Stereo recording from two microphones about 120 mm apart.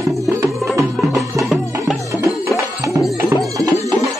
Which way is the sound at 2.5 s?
25° left (ahead or behind).